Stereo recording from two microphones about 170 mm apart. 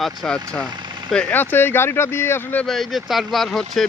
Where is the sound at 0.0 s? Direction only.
5° left (ahead or behind).